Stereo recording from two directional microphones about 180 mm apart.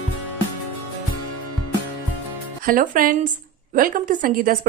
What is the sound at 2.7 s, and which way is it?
Speech, 50° right (ahead or behind).